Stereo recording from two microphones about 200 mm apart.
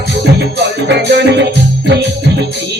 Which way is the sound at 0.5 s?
55° right (ahead or behind).